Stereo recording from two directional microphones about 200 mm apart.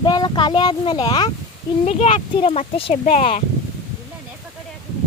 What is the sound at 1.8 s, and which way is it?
Speech, 35° left (ahead or behind).